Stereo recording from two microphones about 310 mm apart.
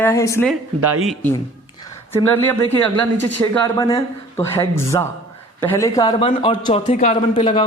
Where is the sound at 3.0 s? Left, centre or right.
Centre.